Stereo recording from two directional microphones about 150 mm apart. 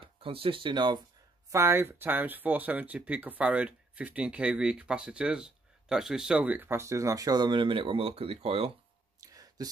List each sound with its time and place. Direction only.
0.0 s speech: 35° right (ahead or behind)
1.5 s speech: 15° right (ahead or behind); by 8.7 s 40° right (ahead or behind)
9.2 s a sound: 25° right (ahead or behind)